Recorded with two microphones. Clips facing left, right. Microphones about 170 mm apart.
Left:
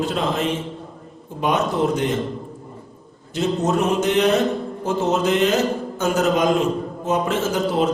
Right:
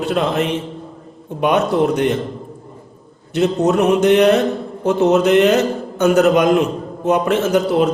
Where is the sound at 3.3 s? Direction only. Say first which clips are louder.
Right 5 dB; 65° right (ahead or behind).